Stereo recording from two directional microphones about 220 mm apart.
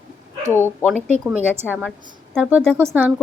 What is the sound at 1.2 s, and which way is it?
Speech, 5° right (ahead or behind).